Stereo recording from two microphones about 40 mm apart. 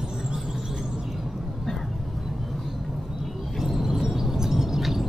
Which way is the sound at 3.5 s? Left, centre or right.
Centre.